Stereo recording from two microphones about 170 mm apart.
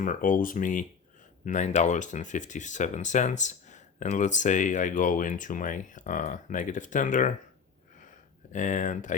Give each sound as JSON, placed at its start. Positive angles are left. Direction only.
{"t": 0.0, "sound": "speech", "side_deg": 50}
{"t": 8.5, "sound": "speech", "side_deg": 45}